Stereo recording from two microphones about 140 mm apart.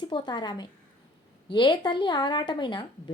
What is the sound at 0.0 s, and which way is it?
A woman's voice, 30° left (ahead or behind).